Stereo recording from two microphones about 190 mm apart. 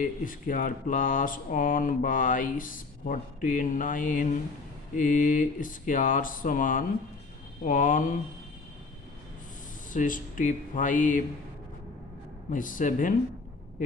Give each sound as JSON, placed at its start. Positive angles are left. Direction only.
{"t": 0.0, "sound": "speech", "side_deg": 45}
{"t": 9.9, "sound": "speech", "side_deg": 45}
{"t": 12.4, "sound": "speech", "side_deg": 45}